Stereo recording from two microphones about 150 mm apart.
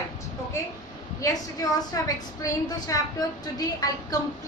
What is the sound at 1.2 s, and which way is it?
A woman's voice, 25° left (ahead or behind).